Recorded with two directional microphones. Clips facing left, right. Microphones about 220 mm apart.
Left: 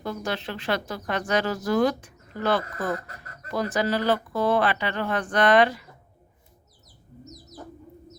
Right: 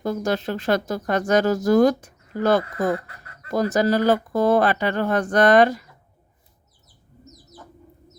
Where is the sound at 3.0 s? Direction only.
40° left (ahead or behind).